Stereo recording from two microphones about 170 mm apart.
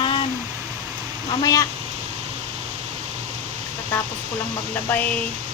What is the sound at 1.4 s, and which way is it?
Speech, 20° left (ahead or behind).